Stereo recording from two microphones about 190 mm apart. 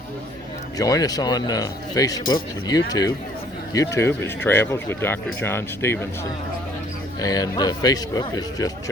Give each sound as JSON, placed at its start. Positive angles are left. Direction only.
{"t": 0.8, "sound": "a man's voice", "side_deg": 20}
{"t": 7.2, "sound": "a man's voice", "side_deg": 20}